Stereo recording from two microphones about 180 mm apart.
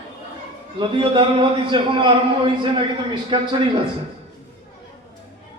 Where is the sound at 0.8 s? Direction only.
25° right (ahead or behind).